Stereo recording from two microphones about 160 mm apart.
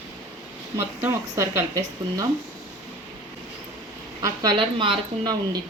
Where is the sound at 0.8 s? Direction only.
15° right (ahead or behind).